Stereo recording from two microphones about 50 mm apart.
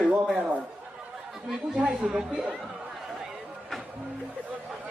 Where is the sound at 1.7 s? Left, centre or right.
Centre.